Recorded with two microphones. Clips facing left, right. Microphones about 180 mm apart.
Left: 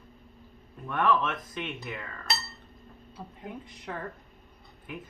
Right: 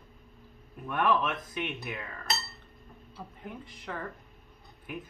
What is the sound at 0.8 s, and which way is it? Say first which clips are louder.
Speech: left 1 dB; 15° right (ahead or behind).